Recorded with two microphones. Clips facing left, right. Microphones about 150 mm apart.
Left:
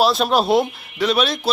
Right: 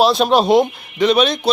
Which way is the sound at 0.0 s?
Centre (ahead or behind).